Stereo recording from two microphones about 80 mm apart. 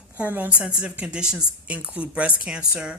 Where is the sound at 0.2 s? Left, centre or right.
Centre.